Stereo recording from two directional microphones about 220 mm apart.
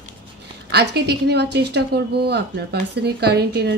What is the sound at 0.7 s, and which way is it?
Speech, 50° right (ahead or behind).